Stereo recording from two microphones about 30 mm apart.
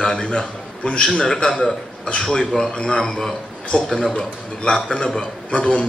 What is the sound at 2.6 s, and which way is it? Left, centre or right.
Speech, left.